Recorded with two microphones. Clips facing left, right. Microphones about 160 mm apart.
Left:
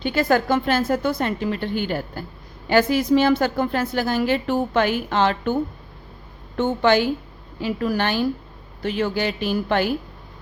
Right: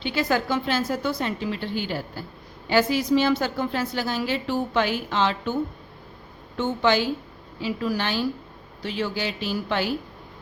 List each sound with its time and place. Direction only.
0.0 s a woman's voice: 50° left (ahead or behind)
6.6 s a woman's voice: 55° left (ahead or behind)